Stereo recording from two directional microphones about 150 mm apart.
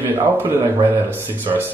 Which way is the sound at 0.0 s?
15° right (ahead or behind).